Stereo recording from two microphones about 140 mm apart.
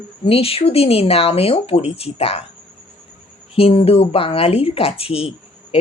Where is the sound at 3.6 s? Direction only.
45° left (ahead or behind).